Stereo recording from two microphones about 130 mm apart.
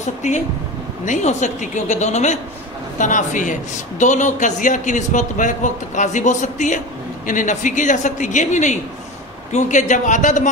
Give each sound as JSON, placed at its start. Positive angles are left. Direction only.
{"t": 0.2, "sound": "a woman's voice", "side_deg": 65}